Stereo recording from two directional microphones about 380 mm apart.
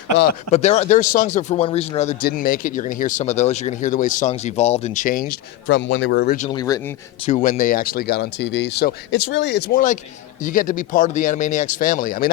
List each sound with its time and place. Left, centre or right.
0.2 s speech: centre